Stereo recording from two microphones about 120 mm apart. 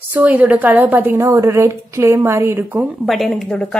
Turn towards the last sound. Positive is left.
turn(degrees=5)  # may be behind; listen again after turning